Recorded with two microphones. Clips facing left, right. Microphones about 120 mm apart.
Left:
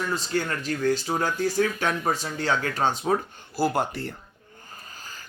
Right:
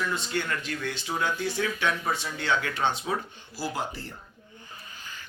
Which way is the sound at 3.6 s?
60° left (ahead or behind).